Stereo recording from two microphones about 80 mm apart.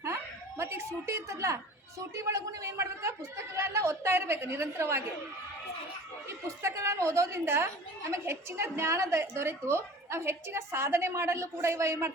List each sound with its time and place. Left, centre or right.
0.0 s a sound: right
2.1 s a woman's voice: right
6.2 s a woman's voice: right